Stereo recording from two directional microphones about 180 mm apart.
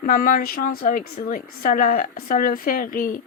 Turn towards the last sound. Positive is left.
turn(degrees=50)  # may be behind; listen again after turning